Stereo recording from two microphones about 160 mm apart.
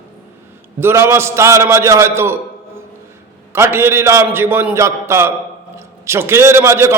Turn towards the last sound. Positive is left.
turn(degrees=-15)  # may be behind; listen again after turning